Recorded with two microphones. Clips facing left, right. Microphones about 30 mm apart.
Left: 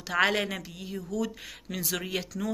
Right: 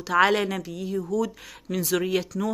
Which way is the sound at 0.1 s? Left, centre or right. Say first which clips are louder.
Right 5 dB; centre.